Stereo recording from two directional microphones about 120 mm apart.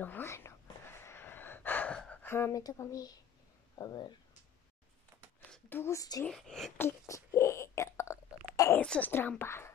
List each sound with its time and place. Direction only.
0.0 s whispering: 15° left (ahead or behind)
2.6 s speech: 30° left (ahead or behind)
5.7 s speech: 20° left (ahead or behind)
6.2 s speech: 5° left (ahead or behind)
6.8 s a sound: 20° left (ahead or behind)
8.7 s a woman's voice: 10° left (ahead or behind)